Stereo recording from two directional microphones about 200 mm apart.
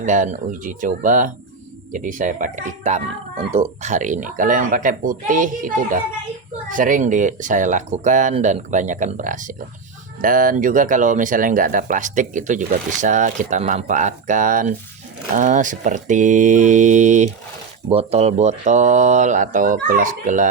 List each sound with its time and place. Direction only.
0.0 s speech: 40° right (ahead or behind)